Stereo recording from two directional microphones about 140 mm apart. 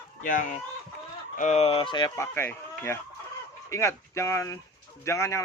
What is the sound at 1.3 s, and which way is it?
Speech, 55° left (ahead or behind).